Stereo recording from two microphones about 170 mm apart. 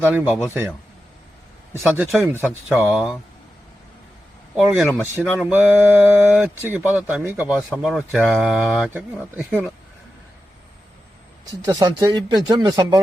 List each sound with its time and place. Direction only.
0.1 s speech: 10° right (ahead or behind)
1.8 s speech: centre (ahead or behind)
4.5 s speech: centre (ahead or behind)
11.6 s speech: 25° right (ahead or behind)